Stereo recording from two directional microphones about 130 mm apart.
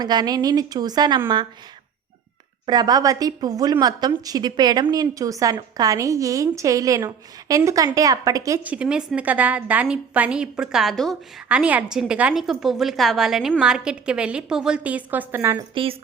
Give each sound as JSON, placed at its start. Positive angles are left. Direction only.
{"t": 0.0, "sound": "a woman's voice", "side_deg": -30}
{"t": 2.6, "sound": "a woman's voice", "side_deg": -30}
{"t": 8.6, "sound": "a woman's voice", "side_deg": -10}
{"t": 11.4, "sound": "a woman's voice", "side_deg": -10}
{"t": 15.7, "sound": "a woman's voice", "side_deg": -45}